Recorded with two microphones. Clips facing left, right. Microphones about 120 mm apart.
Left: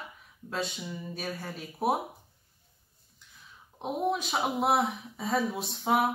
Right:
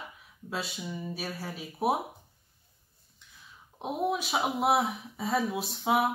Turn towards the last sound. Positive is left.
turn(degrees=0)  # may be behind; listen again after turning